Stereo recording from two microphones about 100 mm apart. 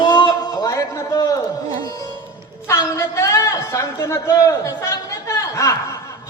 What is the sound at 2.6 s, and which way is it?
A man's voice, 30° left (ahead or behind).